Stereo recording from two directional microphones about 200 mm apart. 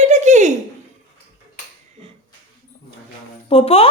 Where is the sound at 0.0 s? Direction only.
35° right (ahead or behind).